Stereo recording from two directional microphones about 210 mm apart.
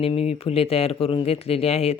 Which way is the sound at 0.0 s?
30° left (ahead or behind).